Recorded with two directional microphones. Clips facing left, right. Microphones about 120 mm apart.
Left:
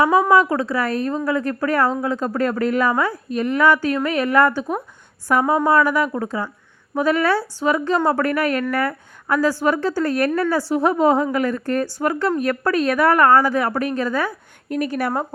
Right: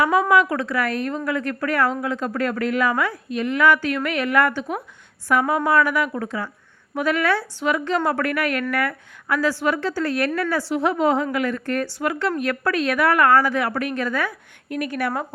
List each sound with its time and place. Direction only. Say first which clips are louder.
0.0 s a woman's voice: left 3 dB; 35° left (ahead or behind)